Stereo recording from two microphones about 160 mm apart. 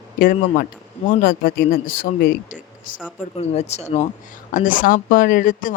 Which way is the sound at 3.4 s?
40° left (ahead or behind).